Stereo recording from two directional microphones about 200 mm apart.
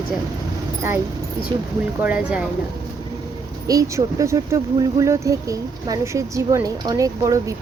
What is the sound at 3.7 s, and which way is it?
A woman's voice, 15° right (ahead or behind).